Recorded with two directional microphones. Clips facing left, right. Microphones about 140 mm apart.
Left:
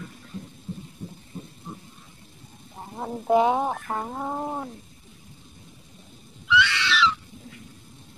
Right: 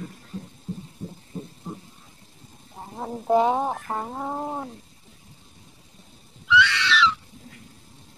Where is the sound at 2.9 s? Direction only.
30° right (ahead or behind).